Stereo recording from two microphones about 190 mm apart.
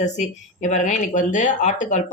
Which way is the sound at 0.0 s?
40° left (ahead or behind).